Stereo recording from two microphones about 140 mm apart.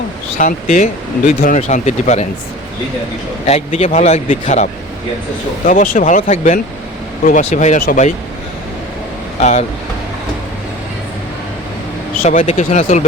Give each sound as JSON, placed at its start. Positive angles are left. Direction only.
{"t": 0.3, "sound": "speech", "side_deg": 65}
{"t": 3.4, "sound": "speech", "side_deg": 50}
{"t": 5.6, "sound": "speech", "side_deg": 70}
{"t": 9.4, "sound": "speech", "side_deg": 60}
{"t": 12.2, "sound": "speech", "side_deg": 60}